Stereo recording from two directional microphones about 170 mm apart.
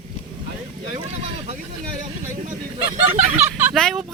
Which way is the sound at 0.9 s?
35° right (ahead or behind).